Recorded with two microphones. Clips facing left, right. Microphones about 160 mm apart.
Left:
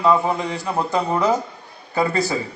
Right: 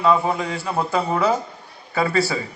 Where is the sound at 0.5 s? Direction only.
20° left (ahead or behind).